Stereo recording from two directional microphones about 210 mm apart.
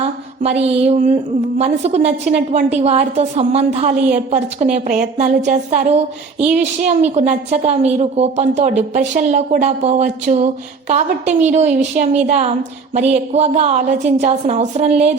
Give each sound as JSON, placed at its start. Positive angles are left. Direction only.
{"t": 0.4, "sound": "a woman's voice", "side_deg": -30}